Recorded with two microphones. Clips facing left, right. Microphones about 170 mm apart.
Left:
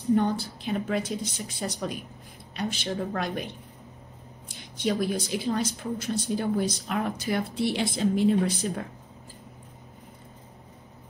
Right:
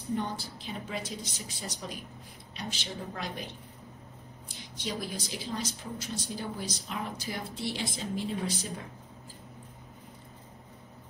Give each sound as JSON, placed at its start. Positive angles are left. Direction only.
{"t": 0.1, "sound": "speech", "side_deg": 60}
{"t": 4.7, "sound": "speech", "side_deg": 55}